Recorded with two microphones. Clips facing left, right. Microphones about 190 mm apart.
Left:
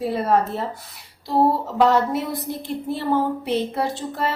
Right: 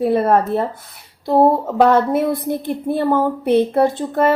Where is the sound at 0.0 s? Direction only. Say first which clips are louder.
Right 5 dB; 55° right (ahead or behind).